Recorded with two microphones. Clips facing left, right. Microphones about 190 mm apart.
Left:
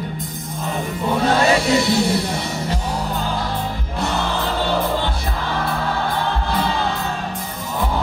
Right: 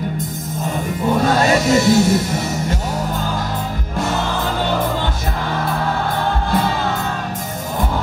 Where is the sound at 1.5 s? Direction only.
45° right (ahead or behind).